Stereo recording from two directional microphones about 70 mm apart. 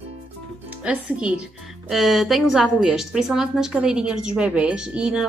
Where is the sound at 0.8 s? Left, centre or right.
Centre.